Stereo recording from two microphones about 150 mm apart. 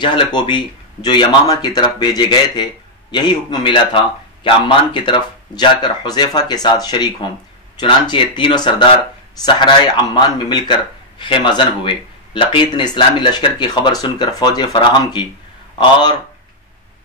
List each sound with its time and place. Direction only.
0.0 s speech: 30° left (ahead or behind)